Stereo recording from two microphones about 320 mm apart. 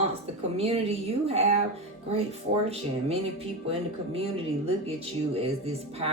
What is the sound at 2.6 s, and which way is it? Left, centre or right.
Speech, centre.